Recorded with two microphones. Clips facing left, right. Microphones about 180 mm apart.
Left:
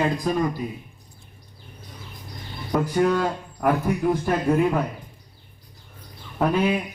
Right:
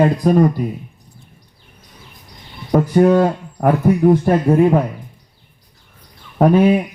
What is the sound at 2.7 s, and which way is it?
Speech, 30° right (ahead or behind).